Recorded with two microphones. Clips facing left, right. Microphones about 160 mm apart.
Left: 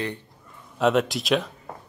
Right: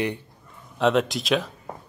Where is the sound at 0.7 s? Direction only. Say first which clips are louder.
Even; centre (ahead or behind).